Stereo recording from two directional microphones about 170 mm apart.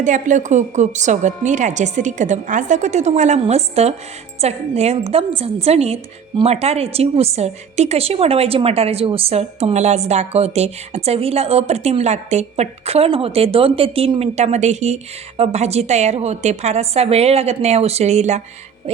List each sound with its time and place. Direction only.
0.0 s a woman's voice: 45° right (ahead or behind)